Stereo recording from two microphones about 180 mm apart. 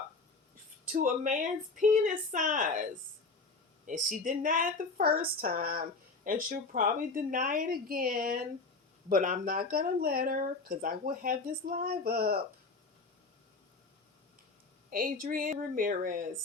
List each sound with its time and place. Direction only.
1.0 s speech: 45° right (ahead or behind)
3.8 s speech: 45° right (ahead or behind)
14.8 s speech: 50° right (ahead or behind)